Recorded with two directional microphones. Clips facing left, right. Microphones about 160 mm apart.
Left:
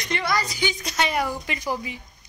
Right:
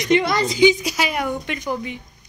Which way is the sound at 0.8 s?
5° right (ahead or behind).